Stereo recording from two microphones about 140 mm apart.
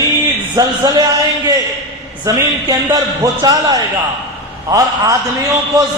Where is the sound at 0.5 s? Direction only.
25° right (ahead or behind).